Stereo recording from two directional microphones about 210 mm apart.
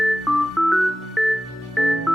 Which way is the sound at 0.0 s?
Centre (ahead or behind).